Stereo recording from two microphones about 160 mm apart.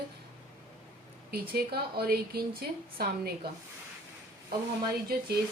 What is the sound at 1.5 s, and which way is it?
A woman's voice, 80° right.